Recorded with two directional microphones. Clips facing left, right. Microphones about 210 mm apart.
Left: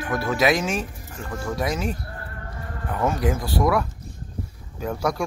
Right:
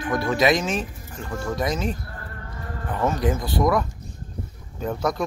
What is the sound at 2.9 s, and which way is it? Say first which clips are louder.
Speech: even; 10° left (ahead or behind).